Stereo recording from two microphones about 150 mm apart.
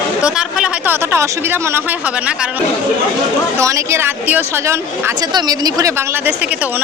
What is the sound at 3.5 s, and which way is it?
Speech, 20° right (ahead or behind).